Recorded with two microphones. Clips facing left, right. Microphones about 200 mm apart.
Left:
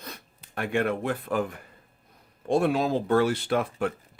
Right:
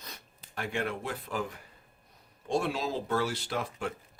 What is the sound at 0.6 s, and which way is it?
Speech, 55° left (ahead or behind).